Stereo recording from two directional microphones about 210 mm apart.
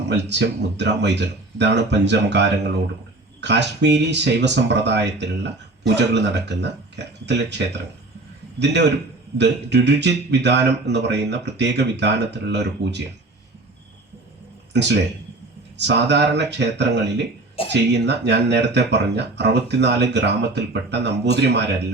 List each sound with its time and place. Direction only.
0.1 s speech: 55° right (ahead or behind)
14.7 s speech: 55° right (ahead or behind)